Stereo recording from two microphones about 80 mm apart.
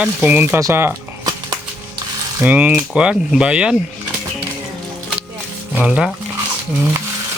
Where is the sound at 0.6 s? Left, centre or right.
Right.